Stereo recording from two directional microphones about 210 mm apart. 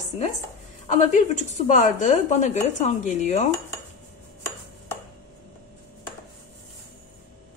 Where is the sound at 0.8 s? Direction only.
35° left (ahead or behind).